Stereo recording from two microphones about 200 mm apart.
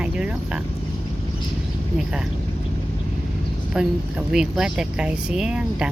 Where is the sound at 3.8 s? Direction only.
5° right (ahead or behind).